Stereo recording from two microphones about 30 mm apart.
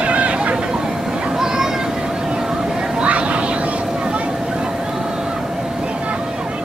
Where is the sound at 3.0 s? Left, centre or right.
Right.